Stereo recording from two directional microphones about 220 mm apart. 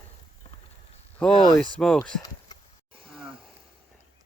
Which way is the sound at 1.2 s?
Centre (ahead or behind).